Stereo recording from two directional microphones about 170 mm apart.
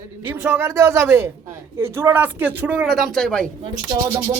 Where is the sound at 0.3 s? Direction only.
15° right (ahead or behind); by 3.5 s 5° left (ahead or behind).